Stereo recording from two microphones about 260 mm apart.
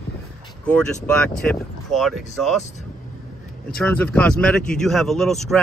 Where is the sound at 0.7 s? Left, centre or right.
Centre.